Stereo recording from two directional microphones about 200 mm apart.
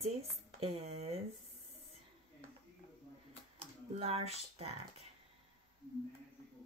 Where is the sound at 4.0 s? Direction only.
30° right (ahead or behind).